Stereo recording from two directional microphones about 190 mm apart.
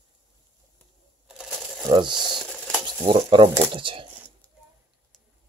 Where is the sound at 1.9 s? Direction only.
25° right (ahead or behind).